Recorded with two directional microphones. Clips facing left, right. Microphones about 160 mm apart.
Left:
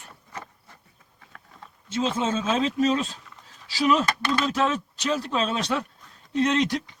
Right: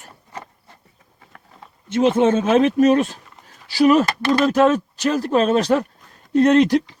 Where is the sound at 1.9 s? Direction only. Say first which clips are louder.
Right 10 dB; 65° right (ahead or behind).